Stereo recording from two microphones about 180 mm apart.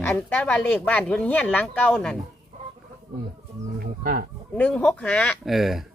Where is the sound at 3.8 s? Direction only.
55° right (ahead or behind).